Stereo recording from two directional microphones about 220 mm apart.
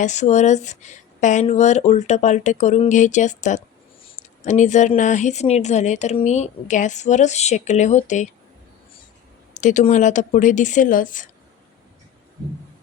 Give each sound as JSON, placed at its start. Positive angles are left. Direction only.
{"t": 0.0, "sound": "speech", "side_deg": 30}
{"t": 9.6, "sound": "speech", "side_deg": 35}